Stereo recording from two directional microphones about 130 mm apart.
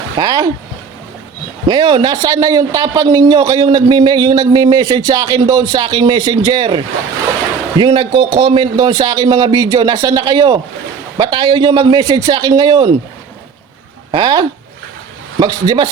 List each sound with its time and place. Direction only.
0.2 s a man's voice: 30° right (ahead or behind)
1.6 s a man's voice: 35° right (ahead or behind)
14.1 s a man's voice: 35° right (ahead or behind)